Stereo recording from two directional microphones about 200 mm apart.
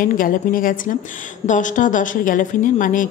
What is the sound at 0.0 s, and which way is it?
A woman's voice, 45° left (ahead or behind).